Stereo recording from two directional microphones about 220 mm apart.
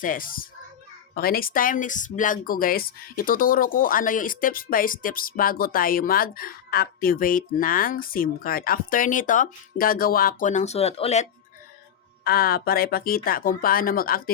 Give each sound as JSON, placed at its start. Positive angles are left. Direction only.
{"t": 0.0, "sound": "speech", "side_deg": 40}
{"t": 12.2, "sound": "speech", "side_deg": 45}